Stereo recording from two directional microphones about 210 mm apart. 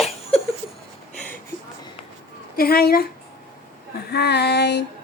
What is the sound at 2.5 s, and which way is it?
Speech, 45° left (ahead or behind).